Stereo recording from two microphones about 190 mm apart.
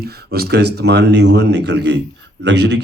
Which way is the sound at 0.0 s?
55° right (ahead or behind).